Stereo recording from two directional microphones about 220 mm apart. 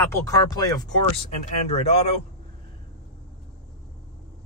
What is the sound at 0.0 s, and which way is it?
Speech, 15° left (ahead or behind).